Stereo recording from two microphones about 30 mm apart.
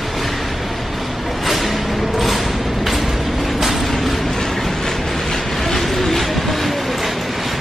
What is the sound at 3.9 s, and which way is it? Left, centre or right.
Train, centre.